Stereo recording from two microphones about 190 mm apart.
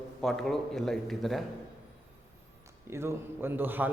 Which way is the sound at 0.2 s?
Centre (ahead or behind).